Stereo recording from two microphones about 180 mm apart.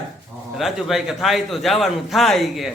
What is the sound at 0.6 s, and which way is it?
A man's voice, centre (ahead or behind).